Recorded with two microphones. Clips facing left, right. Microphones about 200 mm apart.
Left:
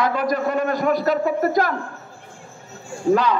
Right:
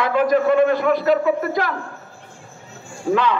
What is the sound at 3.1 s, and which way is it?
Speech, 40° left (ahead or behind).